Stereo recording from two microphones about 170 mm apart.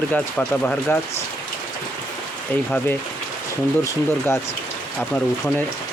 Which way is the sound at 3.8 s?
15° left (ahead or behind).